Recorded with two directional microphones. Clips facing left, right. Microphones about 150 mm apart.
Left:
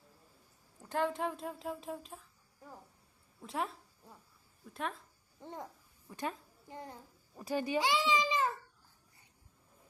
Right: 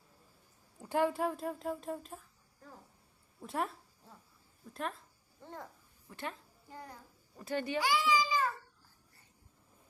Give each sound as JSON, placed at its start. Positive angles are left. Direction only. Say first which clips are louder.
{"t": 0.8, "sound": "speech", "louder": "right 3 dB", "side_deg": -10}
{"t": 3.4, "sound": "speech", "louder": "right 1 dB", "side_deg": 0}
{"t": 4.7, "sound": "speech", "louder": "even", "side_deg": 0}
{"t": 5.4, "sound": "a child's voice", "louder": "left 2 dB", "side_deg": 20}